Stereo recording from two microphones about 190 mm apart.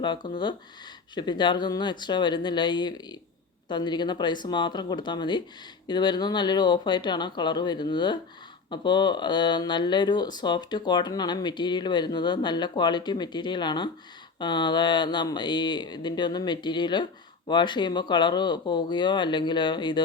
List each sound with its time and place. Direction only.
0.0 s speech: 25° left (ahead or behind)